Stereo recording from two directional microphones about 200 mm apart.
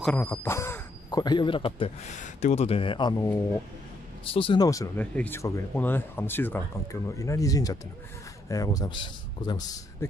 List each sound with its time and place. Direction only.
0.0 s speech: 10° left (ahead or behind)